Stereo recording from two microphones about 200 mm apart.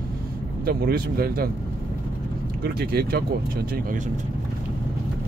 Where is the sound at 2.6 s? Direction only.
50° right (ahead or behind).